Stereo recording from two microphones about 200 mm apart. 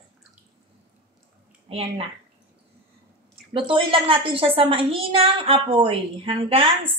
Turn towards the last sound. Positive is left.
turn(degrees=-30)  # may be behind; listen again after turning